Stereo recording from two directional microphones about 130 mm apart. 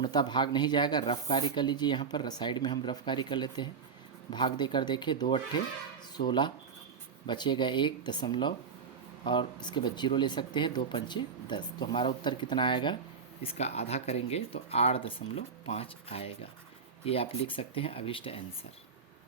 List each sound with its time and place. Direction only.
0.0 s speech: 35° left (ahead or behind)
13.4 s speech: 50° left (ahead or behind)